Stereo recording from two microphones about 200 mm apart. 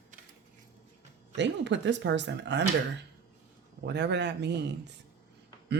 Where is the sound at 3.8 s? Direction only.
60° right (ahead or behind).